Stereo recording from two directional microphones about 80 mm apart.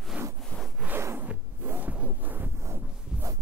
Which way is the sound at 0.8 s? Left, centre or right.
Right.